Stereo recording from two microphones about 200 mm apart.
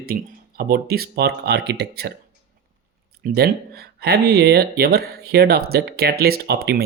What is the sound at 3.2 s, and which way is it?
Speech, 50° right (ahead or behind).